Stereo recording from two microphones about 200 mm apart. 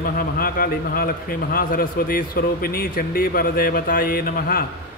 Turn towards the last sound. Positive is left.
turn(degrees=50)  # may be behind; listen again after turning